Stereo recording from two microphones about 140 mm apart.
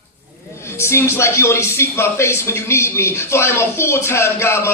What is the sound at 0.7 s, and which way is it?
Speech, 20° left (ahead or behind).